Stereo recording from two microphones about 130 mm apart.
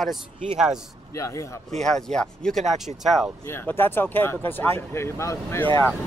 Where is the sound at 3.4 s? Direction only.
15° left (ahead or behind).